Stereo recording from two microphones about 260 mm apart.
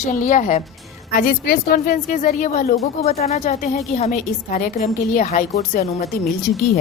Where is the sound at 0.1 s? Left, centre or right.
Left.